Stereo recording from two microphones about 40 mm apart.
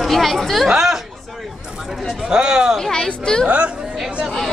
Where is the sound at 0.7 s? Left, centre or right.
Centre.